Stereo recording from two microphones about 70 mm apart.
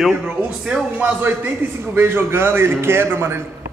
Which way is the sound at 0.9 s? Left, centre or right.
Right.